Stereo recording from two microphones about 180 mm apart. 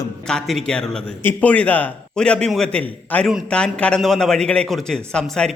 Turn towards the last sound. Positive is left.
turn(degrees=5)  # may be behind; listen again after turning